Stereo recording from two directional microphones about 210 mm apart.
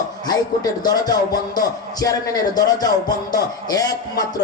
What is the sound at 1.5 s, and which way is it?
Music, 15° left (ahead or behind).